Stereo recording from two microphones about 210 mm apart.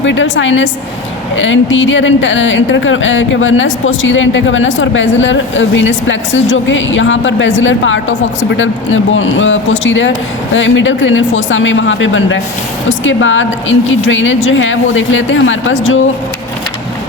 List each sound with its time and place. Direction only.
0.0 s speech: 60° left (ahead or behind)